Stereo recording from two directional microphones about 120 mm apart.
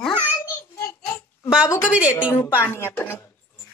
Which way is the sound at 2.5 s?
20° left (ahead or behind).